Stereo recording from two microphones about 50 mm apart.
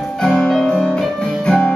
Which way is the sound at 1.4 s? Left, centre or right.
Centre.